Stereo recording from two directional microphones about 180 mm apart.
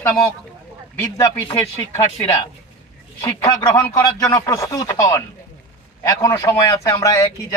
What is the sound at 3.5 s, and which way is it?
A man's voice, 15° left (ahead or behind).